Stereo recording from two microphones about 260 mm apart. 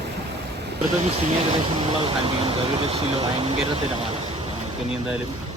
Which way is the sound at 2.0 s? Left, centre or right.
Right.